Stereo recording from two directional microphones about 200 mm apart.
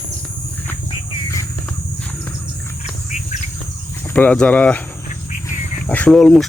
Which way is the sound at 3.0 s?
35° left (ahead or behind).